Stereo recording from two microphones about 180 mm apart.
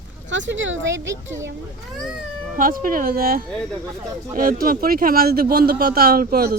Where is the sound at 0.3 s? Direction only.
90° right.